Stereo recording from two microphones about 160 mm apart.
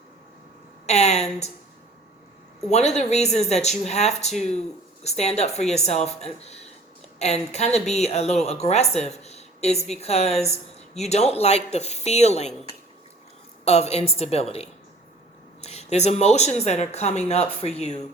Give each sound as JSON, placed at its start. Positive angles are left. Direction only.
{"t": 0.9, "sound": "speech", "side_deg": 45}
{"t": 2.6, "sound": "a woman's voice", "side_deg": 45}
{"t": 13.7, "sound": "a woman's voice", "side_deg": 40}